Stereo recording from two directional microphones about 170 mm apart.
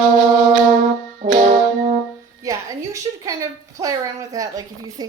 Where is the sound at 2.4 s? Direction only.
20° right (ahead or behind).